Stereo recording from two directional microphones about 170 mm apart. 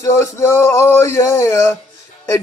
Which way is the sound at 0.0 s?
15° left (ahead or behind).